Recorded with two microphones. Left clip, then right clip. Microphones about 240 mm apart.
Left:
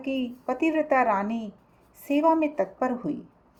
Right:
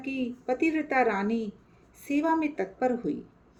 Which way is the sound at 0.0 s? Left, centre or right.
Centre.